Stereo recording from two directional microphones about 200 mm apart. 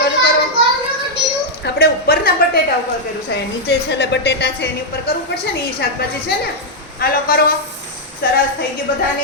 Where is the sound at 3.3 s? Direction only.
60° left (ahead or behind).